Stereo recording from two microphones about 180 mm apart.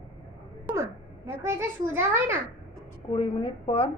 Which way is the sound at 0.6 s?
15° right (ahead or behind).